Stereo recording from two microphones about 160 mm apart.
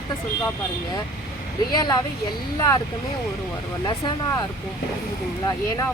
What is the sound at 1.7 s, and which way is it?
Speech, 25° left (ahead or behind).